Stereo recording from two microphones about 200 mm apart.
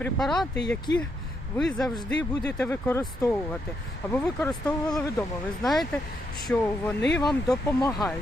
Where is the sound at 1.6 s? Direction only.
Centre (ahead or behind).